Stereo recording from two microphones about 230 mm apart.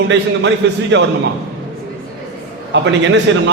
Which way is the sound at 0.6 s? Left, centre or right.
Right.